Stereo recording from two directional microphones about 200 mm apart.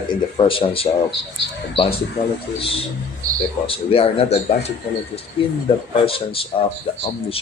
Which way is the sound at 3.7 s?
30° left (ahead or behind).